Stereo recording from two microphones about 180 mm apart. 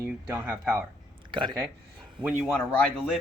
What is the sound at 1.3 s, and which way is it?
Speech, 25° right (ahead or behind).